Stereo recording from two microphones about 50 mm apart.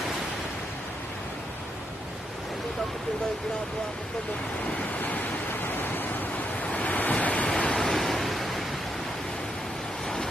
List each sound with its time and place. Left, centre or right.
4.9 s waves: left
6.6 s waves: left
7.4 s waves: centre